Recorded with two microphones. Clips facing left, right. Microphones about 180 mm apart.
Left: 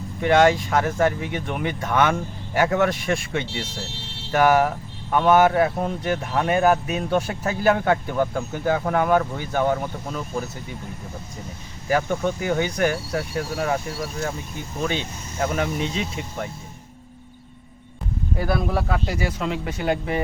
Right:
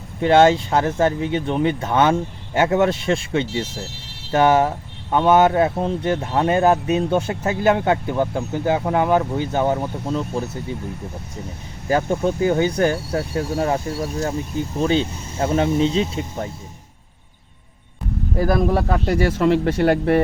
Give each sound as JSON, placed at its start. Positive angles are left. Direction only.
{"t": 0.2, "sound": "speech", "side_deg": -25}
{"t": 11.9, "sound": "speech", "side_deg": -30}
{"t": 18.3, "sound": "speech", "side_deg": -40}
{"t": 19.0, "sound": "speech", "side_deg": -60}